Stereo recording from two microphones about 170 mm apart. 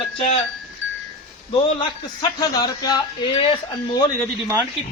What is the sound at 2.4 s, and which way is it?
A man's voice, 20° left (ahead or behind).